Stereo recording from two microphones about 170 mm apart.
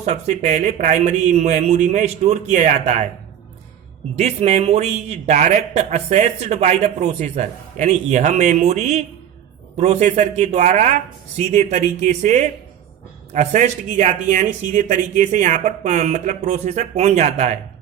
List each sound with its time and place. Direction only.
0.0 s speech: 40° right (ahead or behind)
4.1 s speech: 40° right (ahead or behind)